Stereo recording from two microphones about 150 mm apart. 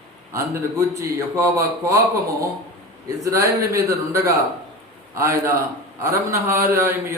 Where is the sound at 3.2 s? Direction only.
20° right (ahead or behind).